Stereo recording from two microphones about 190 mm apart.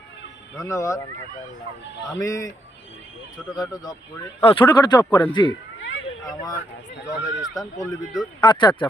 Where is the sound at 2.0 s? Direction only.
15° left (ahead or behind).